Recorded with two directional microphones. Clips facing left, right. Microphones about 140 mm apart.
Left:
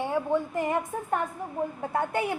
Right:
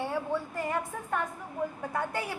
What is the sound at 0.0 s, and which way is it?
A woman's voice, 20° left (ahead or behind).